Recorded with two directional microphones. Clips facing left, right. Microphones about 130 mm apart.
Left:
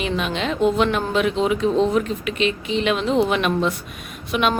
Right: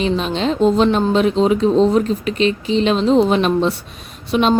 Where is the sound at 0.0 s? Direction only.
30° right (ahead or behind).